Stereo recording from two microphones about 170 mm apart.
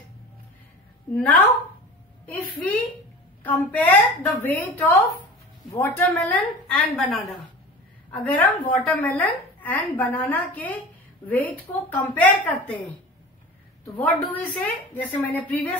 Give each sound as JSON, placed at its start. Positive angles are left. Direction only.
{"t": 1.1, "sound": "a woman's voice", "side_deg": 5}
{"t": 3.4, "sound": "a woman's voice", "side_deg": 10}
{"t": 13.9, "sound": "a woman's voice", "side_deg": 10}